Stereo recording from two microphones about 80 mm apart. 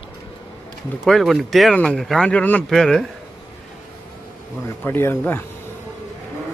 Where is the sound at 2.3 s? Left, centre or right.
Centre.